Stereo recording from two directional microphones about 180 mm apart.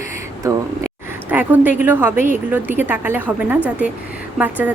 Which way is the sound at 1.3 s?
10° right (ahead or behind).